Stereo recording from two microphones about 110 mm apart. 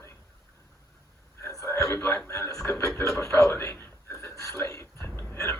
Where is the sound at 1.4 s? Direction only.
25° left (ahead or behind).